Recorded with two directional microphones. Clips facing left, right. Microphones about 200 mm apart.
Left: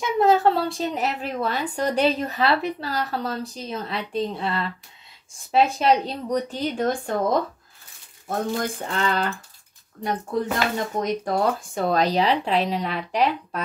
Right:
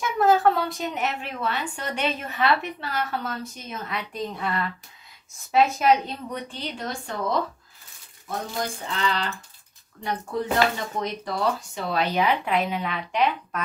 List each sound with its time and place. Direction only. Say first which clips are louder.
0.0 s a woman's voice: left 1 dB; 20° left (ahead or behind); by 9.3 s 50° left (ahead or behind)
11.0 s a woman's voice: left 6 dB; 50° left (ahead or behind)